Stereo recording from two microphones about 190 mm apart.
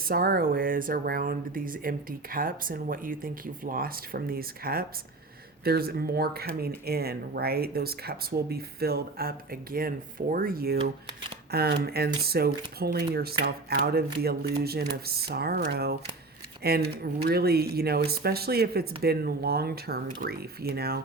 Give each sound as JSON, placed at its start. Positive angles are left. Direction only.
{"t": 0.0, "sound": "speech", "side_deg": -50}